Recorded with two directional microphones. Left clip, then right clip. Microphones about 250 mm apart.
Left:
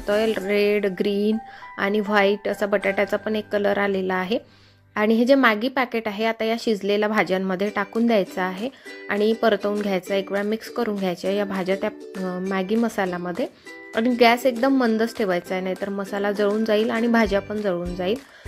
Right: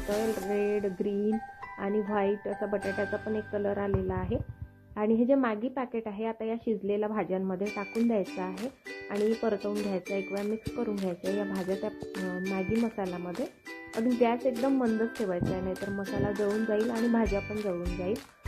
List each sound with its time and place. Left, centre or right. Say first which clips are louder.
0.5 s a woman's voice: left 9 dB; left